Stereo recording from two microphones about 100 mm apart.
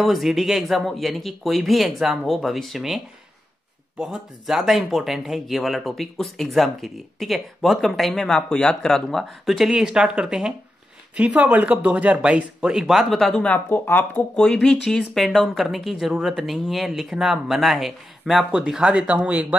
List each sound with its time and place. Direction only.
0.0 s speech: centre (ahead or behind)
4.0 s speech: 5° right (ahead or behind)
13.3 s speech: 15° left (ahead or behind)
14.3 s speech: 5° left (ahead or behind); by 19.4 s 15° right (ahead or behind)